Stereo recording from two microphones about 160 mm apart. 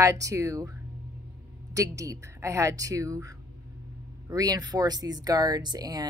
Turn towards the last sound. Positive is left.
turn(degrees=-25)  # may be behind; listen again after turning